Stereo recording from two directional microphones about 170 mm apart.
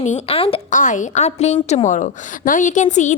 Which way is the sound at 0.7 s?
50° left (ahead or behind).